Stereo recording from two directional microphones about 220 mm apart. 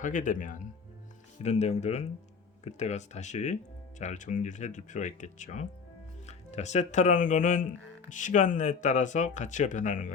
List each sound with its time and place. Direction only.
0.0 s speech: 35° left (ahead or behind)